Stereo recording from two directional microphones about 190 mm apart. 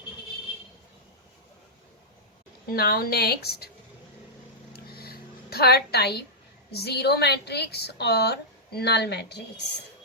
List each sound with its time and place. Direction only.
2.6 s a woman's voice: 55° left (ahead or behind)
4.7 s a sound: 55° left (ahead or behind)
6.7 s a woman's voice: 60° left (ahead or behind)